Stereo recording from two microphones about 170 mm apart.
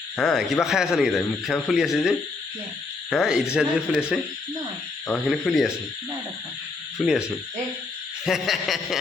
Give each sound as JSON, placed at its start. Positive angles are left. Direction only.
{"t": 0.2, "sound": "a man's voice", "side_deg": 0}
{"t": 7.0, "sound": "a man's voice", "side_deg": -5}